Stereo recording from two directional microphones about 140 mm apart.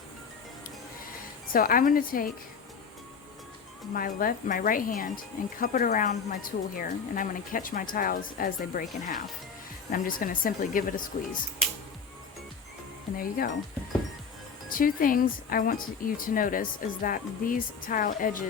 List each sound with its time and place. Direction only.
1.5 s a woman's voice: 90° left
3.9 s speech: 90° left
9.9 s speech: 90° left
14.7 s speech: 90° left